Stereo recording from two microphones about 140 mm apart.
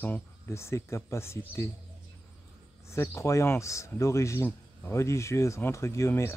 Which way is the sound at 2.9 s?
20° left (ahead or behind).